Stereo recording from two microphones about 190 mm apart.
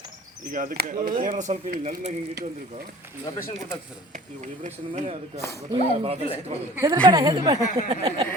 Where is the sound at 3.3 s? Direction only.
20° left (ahead or behind).